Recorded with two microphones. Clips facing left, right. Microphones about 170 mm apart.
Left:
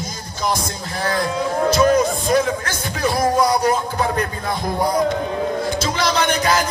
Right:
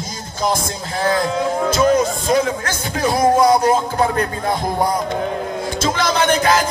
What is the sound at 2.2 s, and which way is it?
Speech, 50° right (ahead or behind).